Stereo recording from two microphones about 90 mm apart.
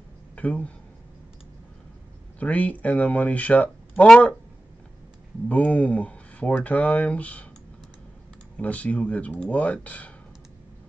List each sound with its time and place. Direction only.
0.4 s speech: 15° left (ahead or behind)
2.3 s speech: 15° left (ahead or behind)
4.1 s speech: 5° left (ahead or behind)
5.5 s speech: 15° left (ahead or behind)
8.5 s speech: 15° left (ahead or behind)